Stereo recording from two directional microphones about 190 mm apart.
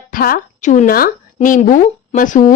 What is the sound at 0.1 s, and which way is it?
A woman's voice, 50° left (ahead or behind).